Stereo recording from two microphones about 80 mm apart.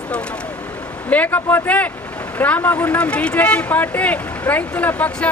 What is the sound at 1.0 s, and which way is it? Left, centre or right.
Speech, centre.